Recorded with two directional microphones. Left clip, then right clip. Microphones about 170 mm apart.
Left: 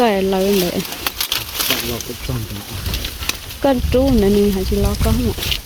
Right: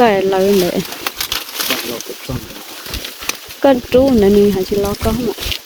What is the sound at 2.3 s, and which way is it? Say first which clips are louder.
Speech: right 3 dB; 20° right (ahead or behind).